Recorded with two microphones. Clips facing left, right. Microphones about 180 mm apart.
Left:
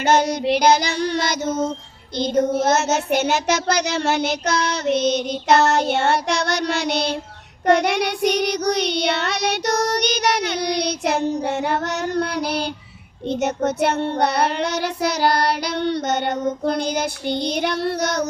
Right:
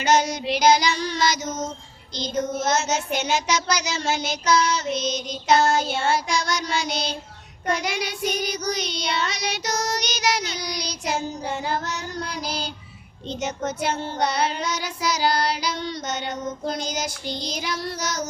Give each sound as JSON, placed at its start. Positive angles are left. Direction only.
{"t": 0.0, "sound": "child singing", "side_deg": 55}
{"t": 1.5, "sound": "child singing", "side_deg": 35}
{"t": 2.1, "sound": "child singing", "side_deg": 55}